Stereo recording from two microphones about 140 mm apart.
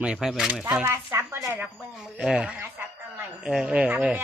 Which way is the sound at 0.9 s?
20° right (ahead or behind).